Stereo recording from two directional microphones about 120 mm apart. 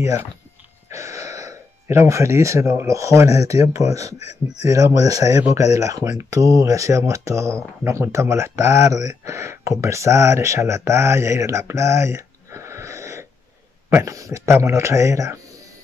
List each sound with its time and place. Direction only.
0.8 s speech: 25° right (ahead or behind)
4.2 s speech: 65° left (ahead or behind)
4.6 s speech: 30° right (ahead or behind)